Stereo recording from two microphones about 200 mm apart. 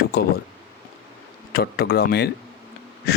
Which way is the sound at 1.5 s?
50° left (ahead or behind).